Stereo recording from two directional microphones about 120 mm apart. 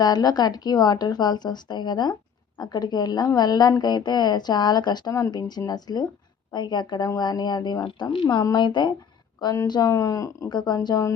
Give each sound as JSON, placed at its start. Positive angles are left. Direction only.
{"t": 0.0, "sound": "a woman's voice", "side_deg": 35}